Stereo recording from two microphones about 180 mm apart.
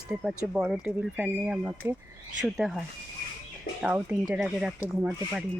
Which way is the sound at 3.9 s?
10° right (ahead or behind).